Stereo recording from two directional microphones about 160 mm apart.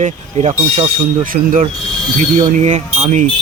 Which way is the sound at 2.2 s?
45° right (ahead or behind).